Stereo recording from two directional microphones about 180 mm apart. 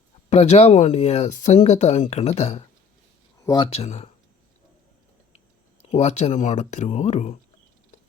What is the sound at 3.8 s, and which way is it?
Speech, 35° left (ahead or behind).